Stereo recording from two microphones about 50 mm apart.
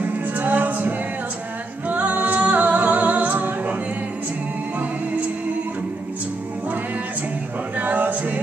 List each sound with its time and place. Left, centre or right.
0.0 s a capella: right
1.9 s music: right
7.7 s male singing: right